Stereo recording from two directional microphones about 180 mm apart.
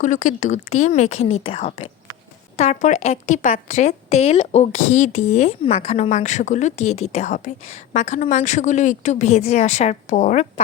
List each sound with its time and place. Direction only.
0.0 s a woman's voice: 45° left (ahead or behind)